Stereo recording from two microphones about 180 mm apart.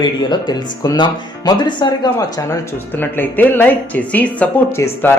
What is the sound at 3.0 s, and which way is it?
Speech, 10° left (ahead or behind).